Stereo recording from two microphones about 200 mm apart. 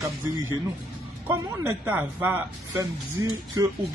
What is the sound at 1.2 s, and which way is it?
Speech, 10° right (ahead or behind).